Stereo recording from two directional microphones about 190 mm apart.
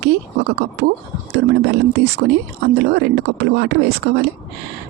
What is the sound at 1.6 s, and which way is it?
Speech, 60° right (ahead or behind).